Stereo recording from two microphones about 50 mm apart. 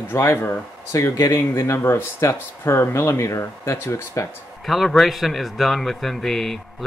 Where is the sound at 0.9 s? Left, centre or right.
Left.